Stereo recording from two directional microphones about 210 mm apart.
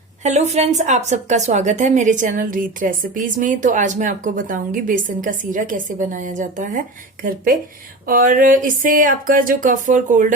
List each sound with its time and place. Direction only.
0.2 s a woman's voice: 35° right (ahead or behind)